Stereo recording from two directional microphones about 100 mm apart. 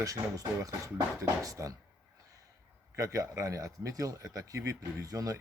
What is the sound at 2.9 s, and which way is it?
A man's voice, 35° right (ahead or behind).